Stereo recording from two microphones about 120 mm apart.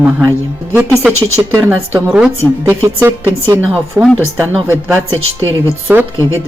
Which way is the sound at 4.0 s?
20° right (ahead or behind).